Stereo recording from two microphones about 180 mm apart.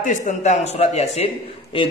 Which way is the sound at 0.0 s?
45° left (ahead or behind).